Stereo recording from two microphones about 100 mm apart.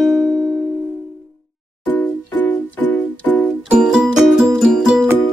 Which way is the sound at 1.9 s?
15° left (ahead or behind).